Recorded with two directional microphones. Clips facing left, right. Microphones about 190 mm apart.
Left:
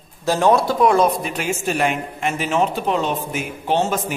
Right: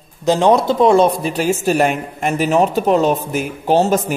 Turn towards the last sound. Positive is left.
turn(degrees=-40)  # may be behind; listen again after turning